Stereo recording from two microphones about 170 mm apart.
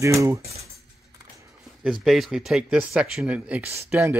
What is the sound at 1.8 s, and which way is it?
Speech, centre (ahead or behind).